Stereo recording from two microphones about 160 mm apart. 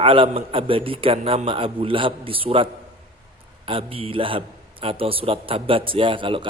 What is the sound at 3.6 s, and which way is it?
A man's voice, 35° right (ahead or behind).